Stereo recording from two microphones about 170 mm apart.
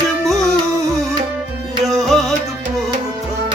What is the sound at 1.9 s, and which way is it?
Music, centre (ahead or behind).